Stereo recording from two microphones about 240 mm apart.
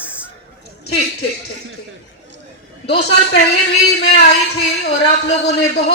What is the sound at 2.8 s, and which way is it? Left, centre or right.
A man's voice, left.